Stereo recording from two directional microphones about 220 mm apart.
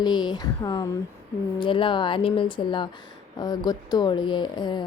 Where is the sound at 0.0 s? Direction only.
20° left (ahead or behind).